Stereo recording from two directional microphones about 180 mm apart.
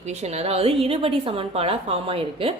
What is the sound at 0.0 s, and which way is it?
A woman's voice, 40° right (ahead or behind).